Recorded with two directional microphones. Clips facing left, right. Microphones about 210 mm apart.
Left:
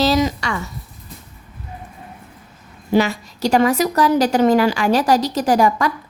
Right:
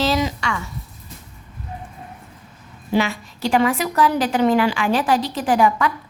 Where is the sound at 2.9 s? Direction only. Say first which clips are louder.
Left 4 dB; 40° left (ahead or behind).